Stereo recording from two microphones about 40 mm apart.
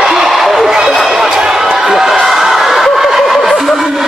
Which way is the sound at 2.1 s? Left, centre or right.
Centre.